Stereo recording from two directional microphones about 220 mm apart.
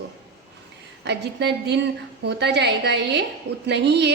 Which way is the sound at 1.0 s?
50° right (ahead or behind).